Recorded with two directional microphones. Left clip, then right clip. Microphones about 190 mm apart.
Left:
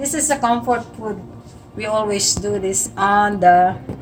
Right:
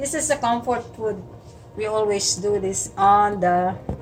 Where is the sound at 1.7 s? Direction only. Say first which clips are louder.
Left 2 dB; 30° left (ahead or behind).